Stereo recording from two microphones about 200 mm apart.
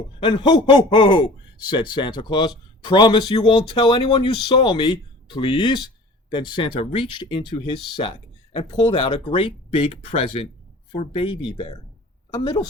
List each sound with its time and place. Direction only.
0.2 s a man's voice: 25° left (ahead or behind)